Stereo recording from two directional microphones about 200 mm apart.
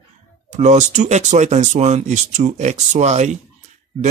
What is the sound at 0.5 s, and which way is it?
Speech, 35° right (ahead or behind).